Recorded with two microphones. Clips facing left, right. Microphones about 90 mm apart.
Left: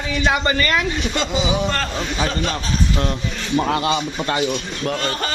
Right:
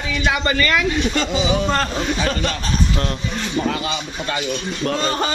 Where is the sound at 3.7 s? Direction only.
45° left (ahead or behind).